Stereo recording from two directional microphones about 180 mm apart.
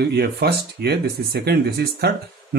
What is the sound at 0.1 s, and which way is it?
Speech, 65° right (ahead or behind).